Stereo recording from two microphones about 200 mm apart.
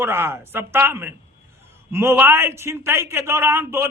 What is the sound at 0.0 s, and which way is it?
A man's voice, 10° right (ahead or behind).